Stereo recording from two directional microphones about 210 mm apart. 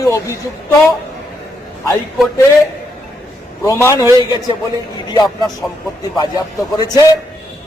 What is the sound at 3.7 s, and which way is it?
Speech, 15° left (ahead or behind).